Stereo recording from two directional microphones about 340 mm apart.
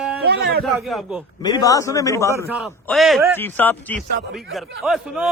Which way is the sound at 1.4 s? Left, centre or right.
Centre.